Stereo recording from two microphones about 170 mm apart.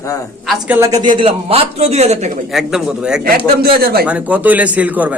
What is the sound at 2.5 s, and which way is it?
Speech, 5° right (ahead or behind).